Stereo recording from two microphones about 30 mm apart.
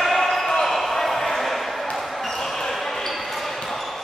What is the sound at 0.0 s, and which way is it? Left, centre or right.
Basketball bounce, centre.